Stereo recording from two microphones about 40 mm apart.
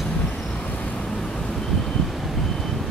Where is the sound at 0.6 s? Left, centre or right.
Left.